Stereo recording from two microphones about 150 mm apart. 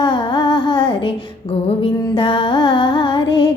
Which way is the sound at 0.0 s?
30° left (ahead or behind).